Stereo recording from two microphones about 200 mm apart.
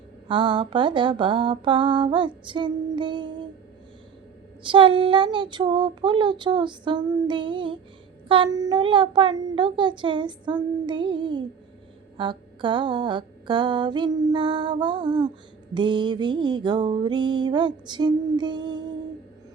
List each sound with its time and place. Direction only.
0.3 s music: 25° right (ahead or behind)
4.6 s music: 25° right (ahead or behind)